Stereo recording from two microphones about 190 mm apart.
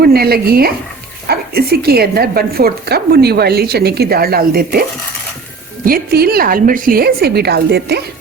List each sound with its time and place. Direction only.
0.0 s a woman's voice: 55° right (ahead or behind)